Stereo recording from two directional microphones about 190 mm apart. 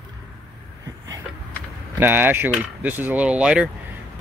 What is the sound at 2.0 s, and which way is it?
Speech, 10° right (ahead or behind).